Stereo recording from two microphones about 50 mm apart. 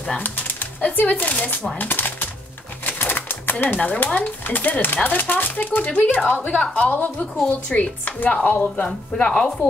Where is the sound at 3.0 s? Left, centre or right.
Left.